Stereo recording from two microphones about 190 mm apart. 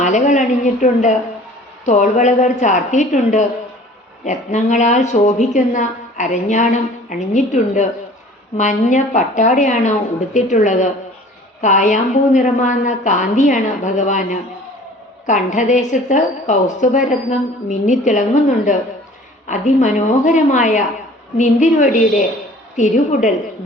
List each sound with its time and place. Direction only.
0.0 s a woman's voice: 40° left (ahead or behind)